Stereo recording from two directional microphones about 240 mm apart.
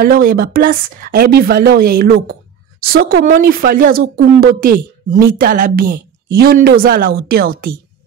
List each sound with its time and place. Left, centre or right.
0.0 s speech: right